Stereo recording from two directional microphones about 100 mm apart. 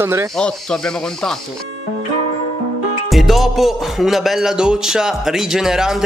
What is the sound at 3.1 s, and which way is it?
Music, centre (ahead or behind).